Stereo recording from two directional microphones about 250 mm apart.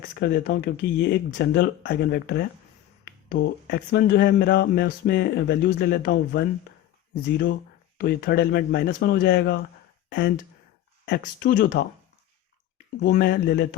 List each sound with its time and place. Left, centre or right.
0.1 s speech: left
7.9 s speech: left
13.0 s speech: left